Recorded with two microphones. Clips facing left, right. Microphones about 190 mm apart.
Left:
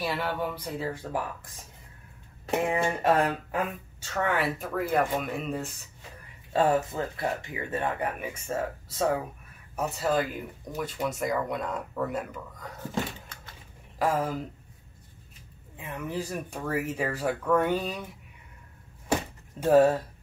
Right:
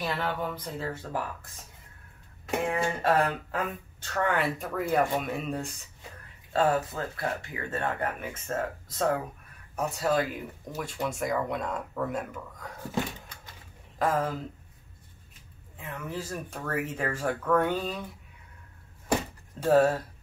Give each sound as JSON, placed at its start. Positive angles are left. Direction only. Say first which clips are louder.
{"t": 0.0, "sound": "speech", "louder": "left 1 dB", "side_deg": 10}
{"t": 2.7, "sound": "speech", "louder": "left 1 dB", "side_deg": 15}
{"t": 4.1, "sound": "speech", "louder": "even", "side_deg": 5}
{"t": 6.5, "sound": "speech", "louder": "left 1 dB", "side_deg": 20}
{"t": 15.8, "sound": "speech", "louder": "left 3 dB", "side_deg": 15}
{"t": 19.6, "sound": "speech", "louder": "left 2 dB", "side_deg": 15}